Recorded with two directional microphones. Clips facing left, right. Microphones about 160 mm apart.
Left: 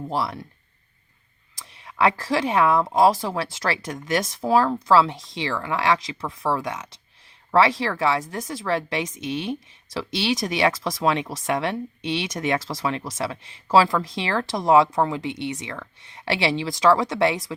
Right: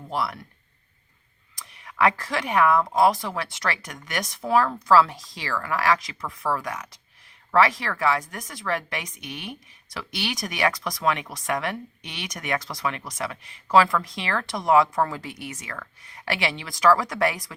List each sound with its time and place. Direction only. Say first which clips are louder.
0.1 s speech: left 1 dB; 30° left (ahead or behind)
1.7 s speech: left 1 dB; 25° left (ahead or behind)